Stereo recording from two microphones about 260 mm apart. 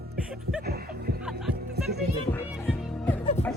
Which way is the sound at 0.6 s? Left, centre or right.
Right.